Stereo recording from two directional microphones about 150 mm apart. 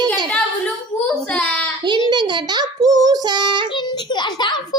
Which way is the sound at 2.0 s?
30° right (ahead or behind).